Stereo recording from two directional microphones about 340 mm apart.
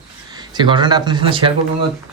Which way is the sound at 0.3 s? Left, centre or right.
Centre.